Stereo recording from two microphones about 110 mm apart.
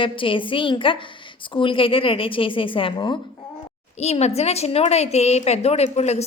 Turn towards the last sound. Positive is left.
turn(degrees=80)